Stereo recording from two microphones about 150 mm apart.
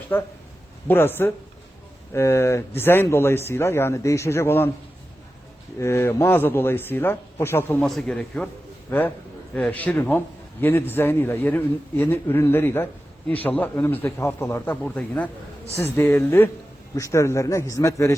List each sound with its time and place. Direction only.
0.1 s a man's voice: 15° left (ahead or behind)
5.8 s a man's voice: 15° left (ahead or behind)
7.8 s a man's voice: 5° left (ahead or behind); by 18.1 s 20° left (ahead or behind)